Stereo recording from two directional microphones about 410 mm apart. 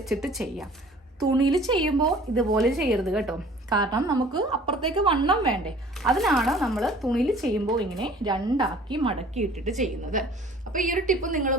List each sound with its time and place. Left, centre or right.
0.0 s a woman's voice: centre
5.6 s a woman's voice: centre